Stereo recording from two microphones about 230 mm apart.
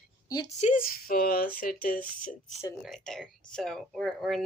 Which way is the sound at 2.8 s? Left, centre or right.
Centre.